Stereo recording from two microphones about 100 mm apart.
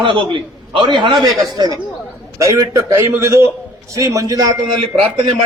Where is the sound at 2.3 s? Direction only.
30° right (ahead or behind).